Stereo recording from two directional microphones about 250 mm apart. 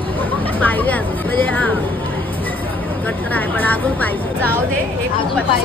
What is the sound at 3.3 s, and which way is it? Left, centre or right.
A woman's voice, centre.